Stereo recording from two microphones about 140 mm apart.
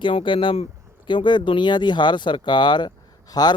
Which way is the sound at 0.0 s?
35° left (ahead or behind).